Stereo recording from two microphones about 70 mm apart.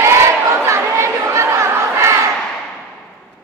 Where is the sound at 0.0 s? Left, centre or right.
Right.